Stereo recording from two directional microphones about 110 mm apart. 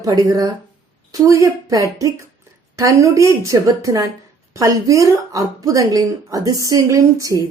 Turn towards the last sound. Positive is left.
turn(degrees=-30)  # may be behind; listen again after turning